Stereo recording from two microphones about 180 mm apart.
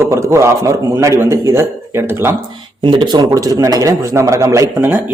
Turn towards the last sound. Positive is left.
turn(degrees=-10)  # may be behind; listen again after turning